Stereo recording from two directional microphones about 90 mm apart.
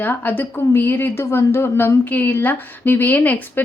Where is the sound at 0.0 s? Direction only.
20° left (ahead or behind).